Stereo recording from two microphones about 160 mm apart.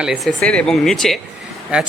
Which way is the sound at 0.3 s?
5° left (ahead or behind).